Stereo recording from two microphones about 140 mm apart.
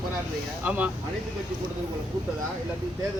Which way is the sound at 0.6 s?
10° right (ahead or behind).